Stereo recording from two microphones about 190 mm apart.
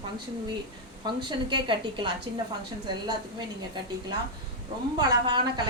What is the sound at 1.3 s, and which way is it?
Speech, 25° right (ahead or behind).